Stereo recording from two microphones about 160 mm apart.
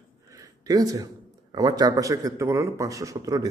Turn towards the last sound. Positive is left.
turn(degrees=-20)  # may be behind; listen again after turning